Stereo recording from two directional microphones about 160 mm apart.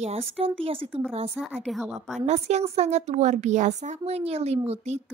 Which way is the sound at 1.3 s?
Centre (ahead or behind).